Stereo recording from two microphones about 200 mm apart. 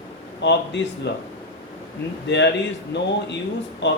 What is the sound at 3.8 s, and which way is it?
Speech, 60° left (ahead or behind).